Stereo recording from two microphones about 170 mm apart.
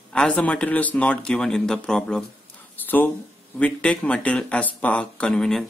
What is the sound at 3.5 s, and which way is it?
Speech, 5° left (ahead or behind).